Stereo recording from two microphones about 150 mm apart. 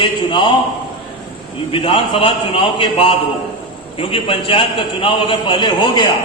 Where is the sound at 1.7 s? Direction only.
35° left (ahead or behind).